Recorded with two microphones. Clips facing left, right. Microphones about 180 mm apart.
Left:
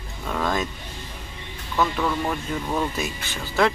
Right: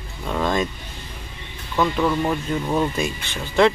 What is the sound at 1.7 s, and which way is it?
Speech, 10° right (ahead or behind).